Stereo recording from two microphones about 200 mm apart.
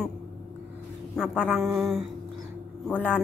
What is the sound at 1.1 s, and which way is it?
Speech, centre (ahead or behind).